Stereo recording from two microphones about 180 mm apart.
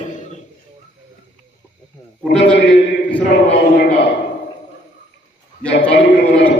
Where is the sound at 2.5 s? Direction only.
70° left (ahead or behind).